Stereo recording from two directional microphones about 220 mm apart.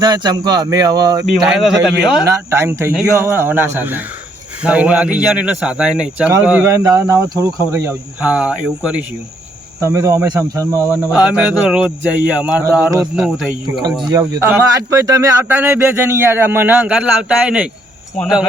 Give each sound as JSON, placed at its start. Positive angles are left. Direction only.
{"t": 0.0, "sound": "speech", "side_deg": -20}
{"t": 1.5, "sound": "speech", "side_deg": 0}
{"t": 2.2, "sound": "speech", "side_deg": -15}